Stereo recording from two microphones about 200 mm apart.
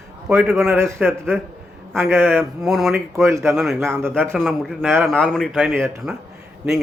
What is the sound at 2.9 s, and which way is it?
Speech, 15° right (ahead or behind).